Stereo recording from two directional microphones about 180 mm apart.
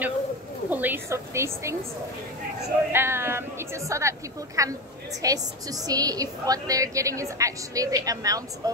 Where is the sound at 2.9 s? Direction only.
15° right (ahead or behind).